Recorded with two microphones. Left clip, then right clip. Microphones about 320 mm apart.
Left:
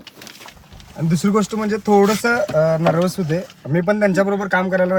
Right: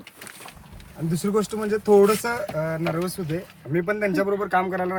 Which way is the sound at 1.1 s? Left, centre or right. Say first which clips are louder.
Left 6 dB; left.